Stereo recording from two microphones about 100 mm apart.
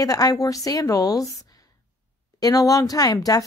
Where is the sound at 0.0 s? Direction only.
35° left (ahead or behind).